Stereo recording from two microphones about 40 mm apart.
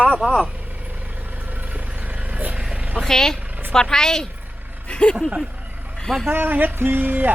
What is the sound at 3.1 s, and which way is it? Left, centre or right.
A woman's voice, centre.